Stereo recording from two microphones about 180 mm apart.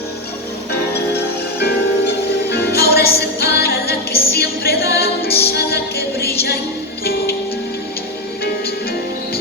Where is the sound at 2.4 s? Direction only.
65° left (ahead or behind).